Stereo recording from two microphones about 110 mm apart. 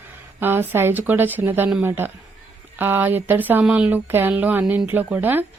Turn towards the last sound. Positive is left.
turn(degrees=-15)  # may be behind; listen again after turning